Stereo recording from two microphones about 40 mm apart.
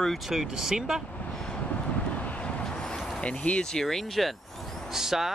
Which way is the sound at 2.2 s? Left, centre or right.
Left.